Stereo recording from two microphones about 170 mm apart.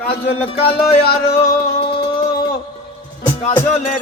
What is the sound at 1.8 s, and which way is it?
Music, 30° left (ahead or behind).